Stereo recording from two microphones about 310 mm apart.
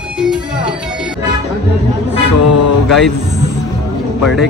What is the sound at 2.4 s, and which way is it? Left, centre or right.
Music, left.